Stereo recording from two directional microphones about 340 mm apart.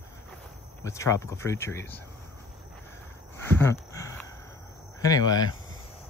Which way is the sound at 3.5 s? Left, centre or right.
Centre.